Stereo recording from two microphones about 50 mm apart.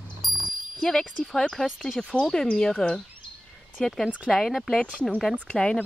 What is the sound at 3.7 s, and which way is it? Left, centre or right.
Speech, centre.